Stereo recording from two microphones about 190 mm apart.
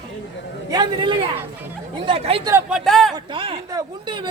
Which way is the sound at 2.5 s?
5° right (ahead or behind).